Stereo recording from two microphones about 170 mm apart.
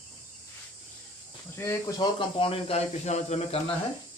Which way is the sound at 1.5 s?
15° left (ahead or behind).